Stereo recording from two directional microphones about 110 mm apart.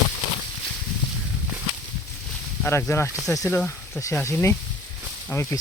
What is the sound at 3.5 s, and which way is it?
Speech, 15° left (ahead or behind).